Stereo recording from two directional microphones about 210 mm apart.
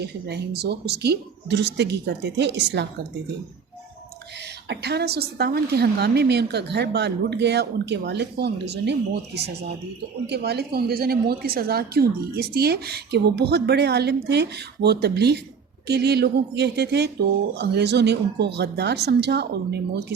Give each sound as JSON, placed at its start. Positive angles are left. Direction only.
{"t": 0.0, "sound": "a woman's voice", "side_deg": -50}
{"t": 4.7, "sound": "a woman's voice", "side_deg": -50}